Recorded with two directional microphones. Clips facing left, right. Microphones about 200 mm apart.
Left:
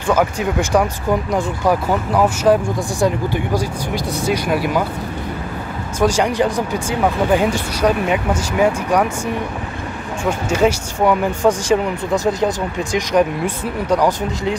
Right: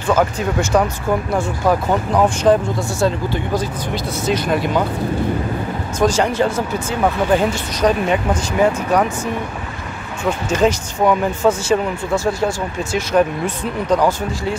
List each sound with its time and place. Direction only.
0.0 s speech: 10° left (ahead or behind)
5.9 s speech: 10° left (ahead or behind)
10.5 s speech: 10° left (ahead or behind)